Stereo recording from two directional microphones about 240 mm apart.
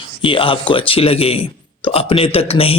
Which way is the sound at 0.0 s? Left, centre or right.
Left.